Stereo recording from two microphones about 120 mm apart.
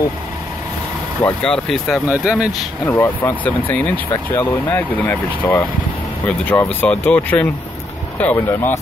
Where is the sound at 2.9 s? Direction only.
20° left (ahead or behind).